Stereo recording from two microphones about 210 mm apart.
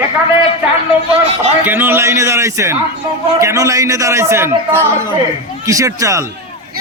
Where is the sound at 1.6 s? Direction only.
10° right (ahead or behind).